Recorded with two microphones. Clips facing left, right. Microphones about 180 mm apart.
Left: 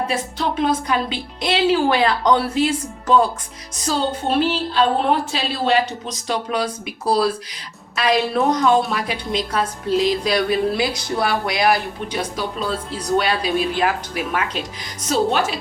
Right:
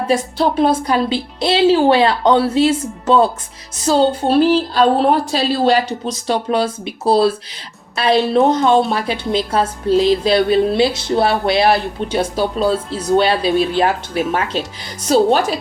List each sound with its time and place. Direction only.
0.3 s a woman's voice: 35° right (ahead or behind)
6.2 s music: 30° right (ahead or behind)
15.0 s a woman's voice: 35° right (ahead or behind)